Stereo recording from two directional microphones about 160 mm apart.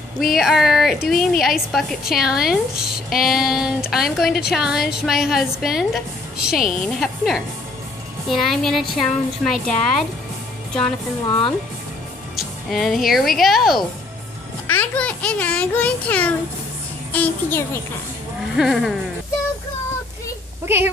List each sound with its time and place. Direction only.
0.2 s a woman's voice: centre (ahead or behind)
11.2 s speech: 30° left (ahead or behind)
12.4 s a child's voice: centre (ahead or behind)
18.6 s a woman's voice: centre (ahead or behind)
20.6 s speech: 15° right (ahead or behind)